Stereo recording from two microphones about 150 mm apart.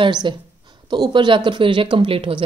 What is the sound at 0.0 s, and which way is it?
Speech, 30° right (ahead or behind).